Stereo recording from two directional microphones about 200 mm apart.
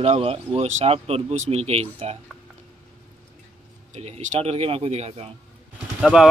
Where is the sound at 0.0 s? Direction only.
30° right (ahead or behind).